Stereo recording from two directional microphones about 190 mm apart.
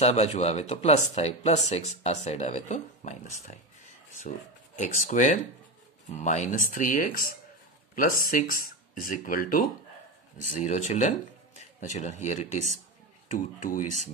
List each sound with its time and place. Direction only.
0.0 s speech: 35° left (ahead or behind)
4.7 s speech: 40° left (ahead or behind)